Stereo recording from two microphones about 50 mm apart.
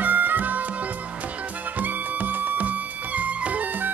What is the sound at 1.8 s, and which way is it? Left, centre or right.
Music, right.